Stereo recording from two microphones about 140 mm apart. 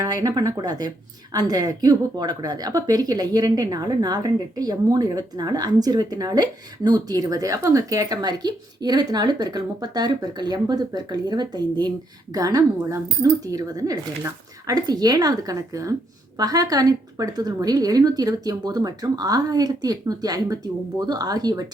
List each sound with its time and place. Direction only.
0.0 s speech: 25° right (ahead or behind)